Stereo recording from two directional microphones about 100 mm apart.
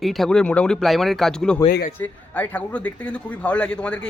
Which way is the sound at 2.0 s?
20° left (ahead or behind).